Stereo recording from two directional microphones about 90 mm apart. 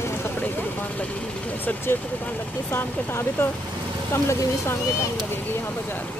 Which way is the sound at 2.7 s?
25° left (ahead or behind).